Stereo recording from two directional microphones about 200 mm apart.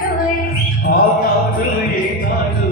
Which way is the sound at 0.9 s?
50° left (ahead or behind).